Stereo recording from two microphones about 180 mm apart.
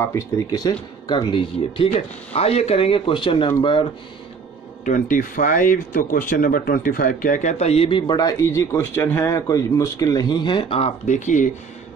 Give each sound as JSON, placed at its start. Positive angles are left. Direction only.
{"t": 0.0, "sound": "speech", "side_deg": 15}
{"t": 4.8, "sound": "speech", "side_deg": 50}